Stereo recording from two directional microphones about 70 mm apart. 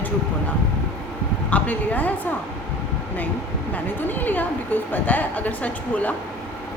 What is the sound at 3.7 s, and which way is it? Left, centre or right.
A woman's voice, left.